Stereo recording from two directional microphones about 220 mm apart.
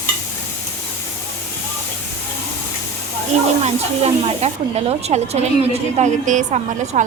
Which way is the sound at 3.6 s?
30° right (ahead or behind).